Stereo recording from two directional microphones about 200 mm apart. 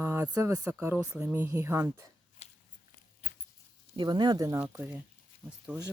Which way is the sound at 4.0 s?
20° right (ahead or behind).